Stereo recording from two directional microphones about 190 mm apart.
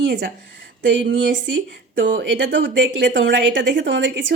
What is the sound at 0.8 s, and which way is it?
A woman's voice, 70° right (ahead or behind).